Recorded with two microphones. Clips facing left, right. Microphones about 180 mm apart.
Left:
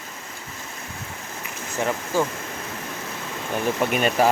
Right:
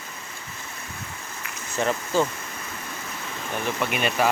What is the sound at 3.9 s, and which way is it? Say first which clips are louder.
Speech: left 3 dB; 40° left (ahead or behind).